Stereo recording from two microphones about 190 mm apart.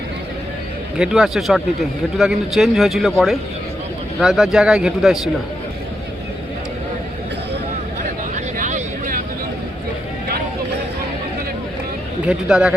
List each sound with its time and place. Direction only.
0.9 s a man's voice: 5° right (ahead or behind)
8.5 s a sound: 45° right (ahead or behind)
12.2 s a man's voice: 5° right (ahead or behind)